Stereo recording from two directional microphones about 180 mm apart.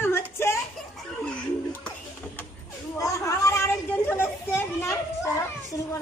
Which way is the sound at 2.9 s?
15° left (ahead or behind).